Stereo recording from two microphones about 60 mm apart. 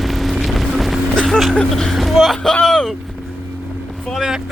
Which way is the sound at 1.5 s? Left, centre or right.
Centre.